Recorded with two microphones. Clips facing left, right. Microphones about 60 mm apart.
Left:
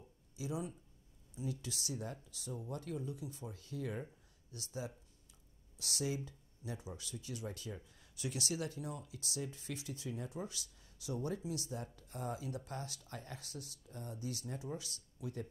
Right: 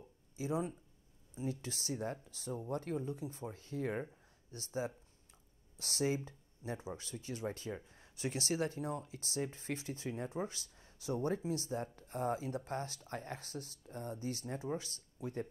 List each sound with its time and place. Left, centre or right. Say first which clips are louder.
0.4 s speech: right 4 dB; right